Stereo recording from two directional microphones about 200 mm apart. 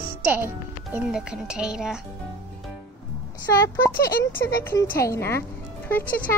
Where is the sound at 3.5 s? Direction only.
15° left (ahead or behind).